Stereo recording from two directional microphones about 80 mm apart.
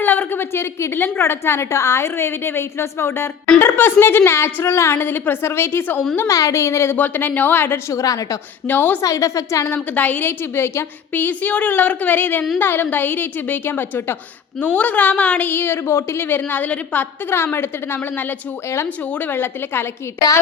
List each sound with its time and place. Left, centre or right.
0.0 s a woman's voice: left
6.2 s a woman's voice: left
6.9 s a woman's voice: left
7.9 s a woman's voice: left
8.6 s a woman's voice: left
9.0 s a woman's voice: left
9.9 s a woman's voice: left
20.1 s a woman's voice: left